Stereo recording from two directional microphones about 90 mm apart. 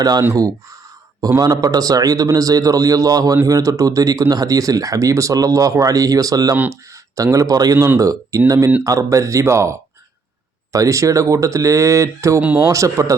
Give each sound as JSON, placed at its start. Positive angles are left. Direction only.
{"t": 0.0, "sound": "a man's voice", "side_deg": -45}
{"t": 1.4, "sound": "a man's voice", "side_deg": -45}
{"t": 12.4, "sound": "speech", "side_deg": -15}
{"t": 12.6, "sound": "speech", "side_deg": -40}